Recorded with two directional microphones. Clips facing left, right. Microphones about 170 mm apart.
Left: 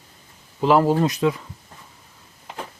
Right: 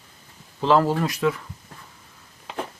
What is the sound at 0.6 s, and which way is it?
Speech, 15° left (ahead or behind).